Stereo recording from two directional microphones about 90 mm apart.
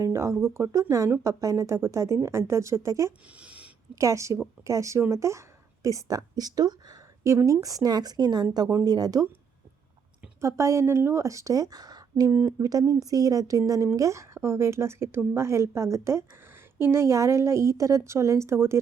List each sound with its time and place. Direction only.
0.0 s speech: 30° right (ahead or behind)
3.3 s a sound: 15° right (ahead or behind)
3.9 s a woman's voice: 35° right (ahead or behind)
10.4 s speech: 30° right (ahead or behind)